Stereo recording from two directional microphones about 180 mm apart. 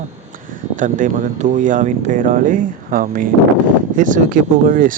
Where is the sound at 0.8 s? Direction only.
45° right (ahead or behind).